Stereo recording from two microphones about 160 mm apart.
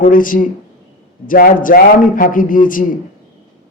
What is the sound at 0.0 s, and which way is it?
A man's voice, 55° left (ahead or behind).